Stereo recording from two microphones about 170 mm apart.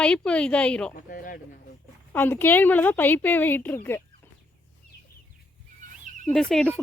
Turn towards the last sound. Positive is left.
turn(degrees=5)  # may be behind; listen again after turning